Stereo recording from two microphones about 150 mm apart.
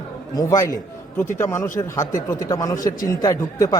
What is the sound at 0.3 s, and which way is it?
A man's voice, 20° left (ahead or behind).